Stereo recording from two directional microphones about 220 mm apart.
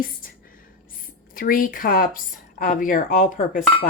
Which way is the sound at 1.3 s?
40° left (ahead or behind).